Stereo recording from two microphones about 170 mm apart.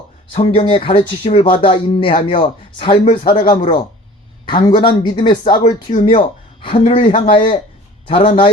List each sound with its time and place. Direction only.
0.3 s speech: 30° left (ahead or behind)